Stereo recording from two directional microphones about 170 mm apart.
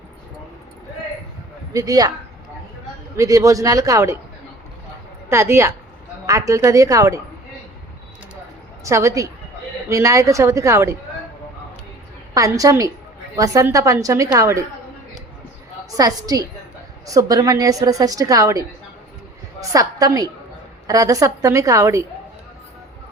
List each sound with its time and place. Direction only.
1.7 s a woman's voice: 20° right (ahead or behind)
3.2 s a woman's voice: 20° right (ahead or behind)
5.3 s a woman's voice: 15° right (ahead or behind)
8.8 s a woman's voice: 15° right (ahead or behind)
12.3 s a woman's voice: 20° right (ahead or behind)
16.0 s a woman's voice: 20° right (ahead or behind)